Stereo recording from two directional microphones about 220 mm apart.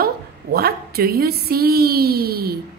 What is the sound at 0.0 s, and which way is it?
A woman's voice, 45° right (ahead or behind).